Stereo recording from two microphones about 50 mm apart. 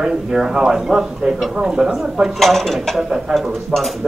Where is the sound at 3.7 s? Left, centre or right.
Centre.